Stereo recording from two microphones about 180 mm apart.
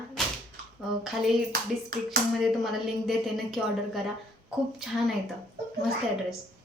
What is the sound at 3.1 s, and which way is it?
Speech, centre (ahead or behind).